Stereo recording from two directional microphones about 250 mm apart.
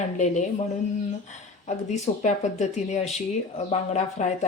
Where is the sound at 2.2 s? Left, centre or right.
Left.